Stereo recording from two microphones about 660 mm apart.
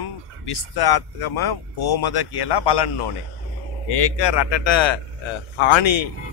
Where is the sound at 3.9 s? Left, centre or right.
Left.